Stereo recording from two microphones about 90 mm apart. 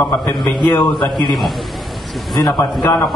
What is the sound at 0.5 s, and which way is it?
Speech, 55° left (ahead or behind).